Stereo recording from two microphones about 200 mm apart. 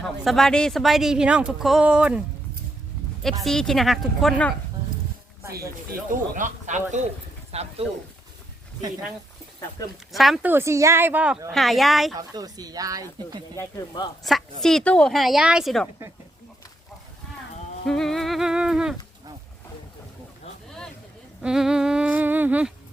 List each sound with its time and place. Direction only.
0.0 s speech: centre (ahead or behind)
3.4 s speech: centre (ahead or behind)
6.1 s speech: 40° right (ahead or behind)
10.1 s speech: centre (ahead or behind)
10.5 s a woman's voice: 15° right (ahead or behind)
12.1 s speech: 20° right (ahead or behind)
13.6 s speech: 20° left (ahead or behind)
14.6 s speech: centre (ahead or behind)
17.8 s speech: centre (ahead or behind)
20.7 s a sound: 5° left (ahead or behind)
21.4 s speech: 5° right (ahead or behind)